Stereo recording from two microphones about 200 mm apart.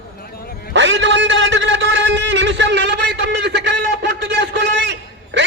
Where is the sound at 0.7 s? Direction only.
65° right (ahead or behind).